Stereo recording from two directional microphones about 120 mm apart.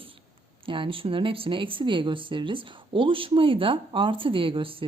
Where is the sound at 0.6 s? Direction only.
45° right (ahead or behind).